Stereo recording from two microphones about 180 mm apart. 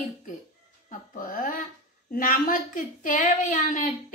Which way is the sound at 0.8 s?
50° left (ahead or behind).